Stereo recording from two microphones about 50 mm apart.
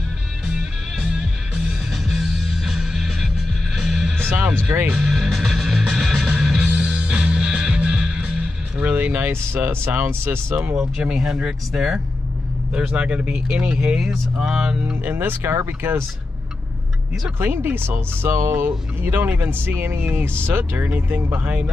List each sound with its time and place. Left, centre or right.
0.6 s music: centre
4.6 s speech: right
4.9 s music: centre
6.7 s music: centre
8.4 s vehicle: right
9.6 s speech: right
10.8 s speech: right
11.7 s speech: centre
12.7 s speech: right
15.0 s speech: right
15.4 s speech: right
17.4 s speech: right
21.3 s speech: right